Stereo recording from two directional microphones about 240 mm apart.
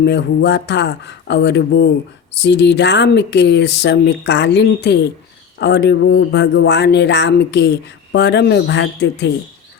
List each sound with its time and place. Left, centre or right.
0.0 s speech: left